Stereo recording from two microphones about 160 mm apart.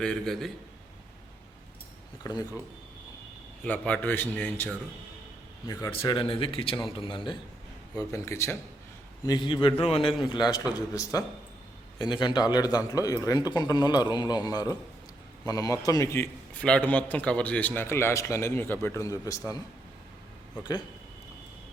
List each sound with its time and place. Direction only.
0.0 s a man's voice: 5° left (ahead or behind)
2.2 s a man's voice: 25° left (ahead or behind)
3.6 s a man's voice: 10° left (ahead or behind)
6.1 s a man's voice: 35° left (ahead or behind)
7.9 s a man's voice: 20° left (ahead or behind)
9.2 s a man's voice: 30° left (ahead or behind)